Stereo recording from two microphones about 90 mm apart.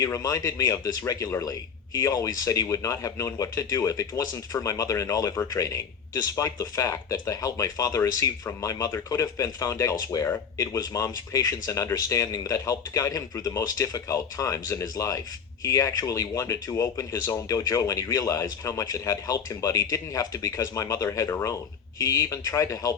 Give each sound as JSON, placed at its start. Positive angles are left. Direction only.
{"t": 0.0, "sound": "a man's voice", "side_deg": 40}